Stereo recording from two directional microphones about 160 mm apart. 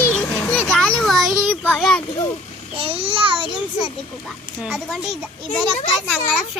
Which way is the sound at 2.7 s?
35° right (ahead or behind).